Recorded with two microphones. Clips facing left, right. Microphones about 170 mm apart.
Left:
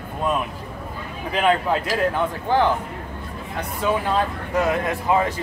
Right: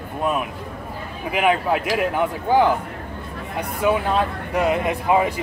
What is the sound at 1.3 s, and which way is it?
Speech, 15° right (ahead or behind).